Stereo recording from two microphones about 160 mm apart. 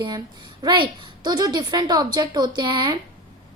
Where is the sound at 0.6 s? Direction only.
30° right (ahead or behind).